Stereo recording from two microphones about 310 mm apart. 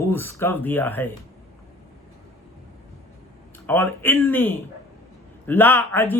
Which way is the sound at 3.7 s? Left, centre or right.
Centre.